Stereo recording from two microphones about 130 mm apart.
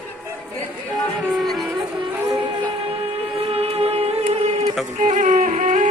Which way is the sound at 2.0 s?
35° right (ahead or behind).